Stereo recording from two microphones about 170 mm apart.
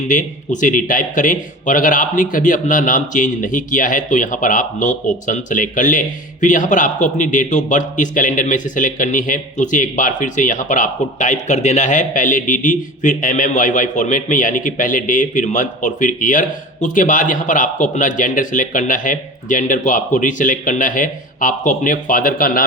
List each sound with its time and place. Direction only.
0.1 s a man's voice: 50° left (ahead or behind)